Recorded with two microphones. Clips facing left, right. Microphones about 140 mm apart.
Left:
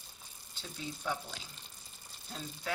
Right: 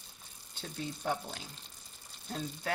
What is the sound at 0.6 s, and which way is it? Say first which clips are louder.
Speech: right 3 dB; 55° right (ahead or behind).